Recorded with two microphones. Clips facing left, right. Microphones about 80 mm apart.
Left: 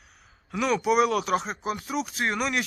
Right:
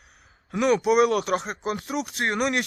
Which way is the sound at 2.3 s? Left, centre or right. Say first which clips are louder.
Right 5 dB; centre.